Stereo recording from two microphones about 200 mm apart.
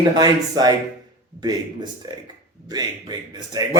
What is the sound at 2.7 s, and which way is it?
Speech, 20° right (ahead or behind).